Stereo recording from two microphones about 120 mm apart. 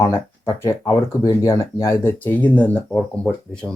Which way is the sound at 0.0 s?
20° left (ahead or behind).